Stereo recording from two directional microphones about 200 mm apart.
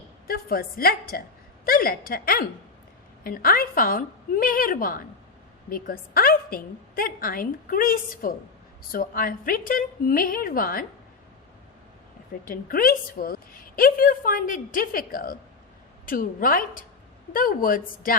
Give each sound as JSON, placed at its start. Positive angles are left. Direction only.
{"t": 0.3, "sound": "a woman's voice", "side_deg": 50}
{"t": 12.5, "sound": "a woman's voice", "side_deg": 45}